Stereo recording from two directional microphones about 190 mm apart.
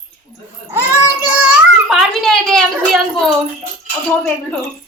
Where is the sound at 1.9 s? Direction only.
Centre (ahead or behind).